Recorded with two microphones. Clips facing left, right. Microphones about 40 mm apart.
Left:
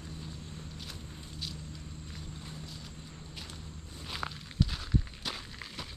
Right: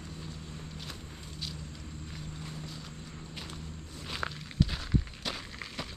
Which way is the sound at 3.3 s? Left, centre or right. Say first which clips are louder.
Right 3 dB; centre.